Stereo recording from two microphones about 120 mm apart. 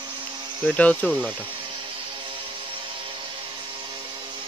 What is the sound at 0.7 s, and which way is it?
Speech, 10° left (ahead or behind).